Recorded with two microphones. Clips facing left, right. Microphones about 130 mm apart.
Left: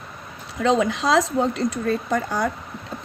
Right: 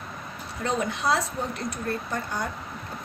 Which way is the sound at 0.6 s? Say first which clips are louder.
Left 7 dB; 90° left.